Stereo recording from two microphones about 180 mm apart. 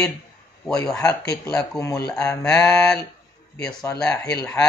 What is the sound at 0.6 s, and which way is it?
Speech, 5° left (ahead or behind).